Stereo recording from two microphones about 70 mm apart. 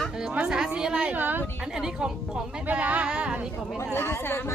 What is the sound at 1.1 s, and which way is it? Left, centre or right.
Speech, right.